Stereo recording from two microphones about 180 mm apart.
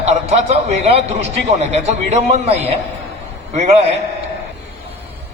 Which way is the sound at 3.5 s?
40° right (ahead or behind).